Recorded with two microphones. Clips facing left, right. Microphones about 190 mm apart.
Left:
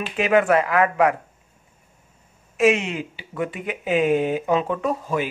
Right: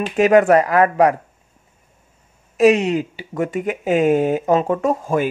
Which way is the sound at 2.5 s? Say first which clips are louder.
Right 5 dB; 35° right (ahead or behind).